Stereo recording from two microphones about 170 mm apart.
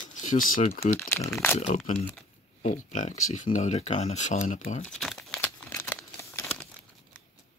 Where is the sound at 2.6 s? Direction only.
45° left (ahead or behind).